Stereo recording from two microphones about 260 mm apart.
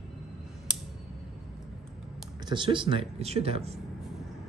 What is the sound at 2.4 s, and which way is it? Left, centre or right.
Speech, centre.